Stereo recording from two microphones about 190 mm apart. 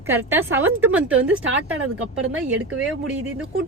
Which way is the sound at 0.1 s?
10° right (ahead or behind).